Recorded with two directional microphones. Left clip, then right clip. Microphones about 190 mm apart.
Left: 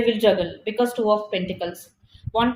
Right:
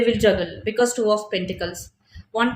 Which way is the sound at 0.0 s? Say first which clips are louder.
Even; 25° right (ahead or behind).